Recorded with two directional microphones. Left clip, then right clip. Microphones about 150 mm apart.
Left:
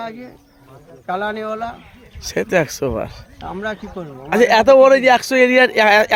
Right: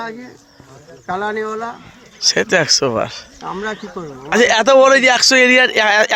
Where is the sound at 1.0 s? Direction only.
40° left (ahead or behind).